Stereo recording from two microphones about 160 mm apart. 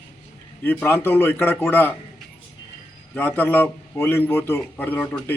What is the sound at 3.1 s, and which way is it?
A man's voice, 10° left (ahead or behind).